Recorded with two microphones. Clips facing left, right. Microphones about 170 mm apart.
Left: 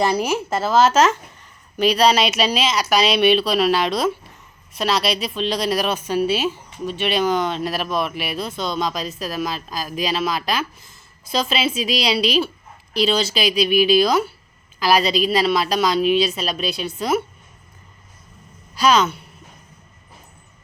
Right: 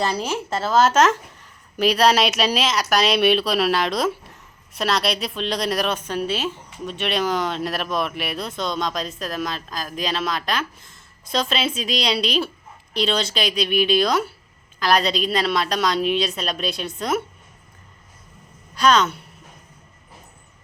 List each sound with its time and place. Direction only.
0.0 s a woman's voice: 10° left (ahead or behind)
18.7 s a woman's voice: 5° left (ahead or behind)